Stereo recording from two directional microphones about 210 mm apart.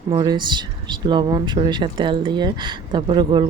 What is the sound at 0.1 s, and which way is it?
Speech, 20° right (ahead or behind).